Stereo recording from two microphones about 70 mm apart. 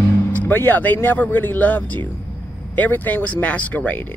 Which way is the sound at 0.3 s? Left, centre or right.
Left.